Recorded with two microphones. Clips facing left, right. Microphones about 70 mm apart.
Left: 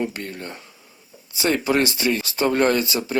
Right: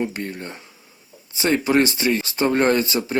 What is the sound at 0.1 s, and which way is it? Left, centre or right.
Speech, right.